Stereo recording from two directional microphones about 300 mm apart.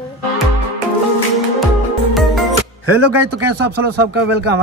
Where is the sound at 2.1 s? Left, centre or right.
Centre.